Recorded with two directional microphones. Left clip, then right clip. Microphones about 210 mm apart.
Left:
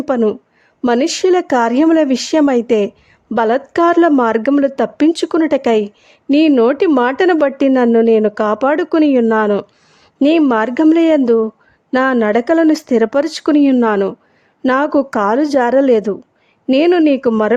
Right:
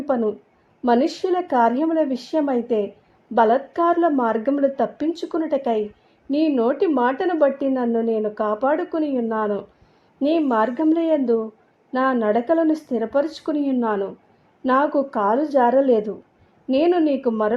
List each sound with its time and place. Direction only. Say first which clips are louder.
0.0 s a woman's voice: left 7 dB; 35° left (ahead or behind)